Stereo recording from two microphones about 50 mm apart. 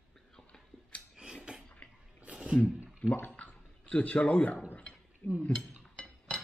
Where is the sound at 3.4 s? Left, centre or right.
Left.